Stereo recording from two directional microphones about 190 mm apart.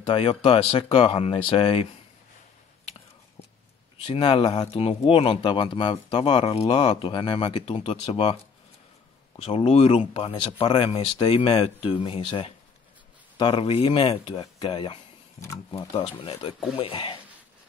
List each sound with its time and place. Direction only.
0.0 s speech: 30° left (ahead or behind)
4.0 s speech: 30° left (ahead or behind)
9.4 s speech: 30° left (ahead or behind)